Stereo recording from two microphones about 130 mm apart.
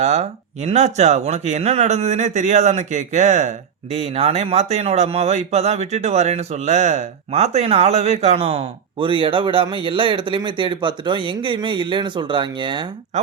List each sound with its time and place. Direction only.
0.0 s speech: 55° right (ahead or behind); by 12.8 s 40° right (ahead or behind)